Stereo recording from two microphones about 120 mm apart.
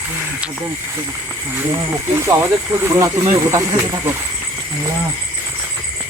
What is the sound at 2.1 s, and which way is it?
Speech, 20° right (ahead or behind).